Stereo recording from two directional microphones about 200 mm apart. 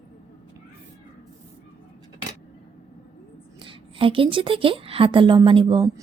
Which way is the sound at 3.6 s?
25° right (ahead or behind).